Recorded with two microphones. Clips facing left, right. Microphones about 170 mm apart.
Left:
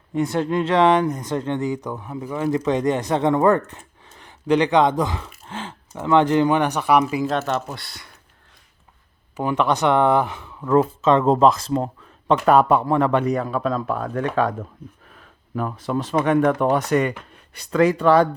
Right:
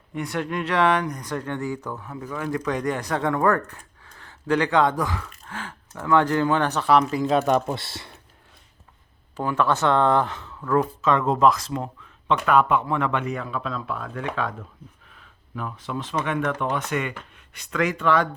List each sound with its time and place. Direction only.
0.1 s speech: 30° left (ahead or behind); by 7.3 s 5° left (ahead or behind)
7.3 s speech: 15° right (ahead or behind)
9.3 s speech: 15° left (ahead or behind)
10.8 s speech: 25° left (ahead or behind)